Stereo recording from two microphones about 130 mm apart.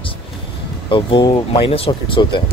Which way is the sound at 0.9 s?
40° left (ahead or behind).